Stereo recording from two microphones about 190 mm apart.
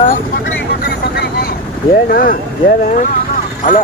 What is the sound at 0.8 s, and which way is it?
Vehicle, 55° left (ahead or behind).